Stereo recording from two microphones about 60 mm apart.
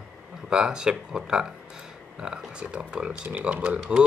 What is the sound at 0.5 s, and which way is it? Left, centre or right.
Speech, centre.